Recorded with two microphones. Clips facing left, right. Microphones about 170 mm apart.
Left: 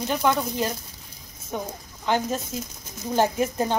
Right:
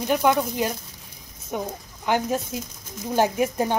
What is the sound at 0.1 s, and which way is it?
Speech, 15° right (ahead or behind).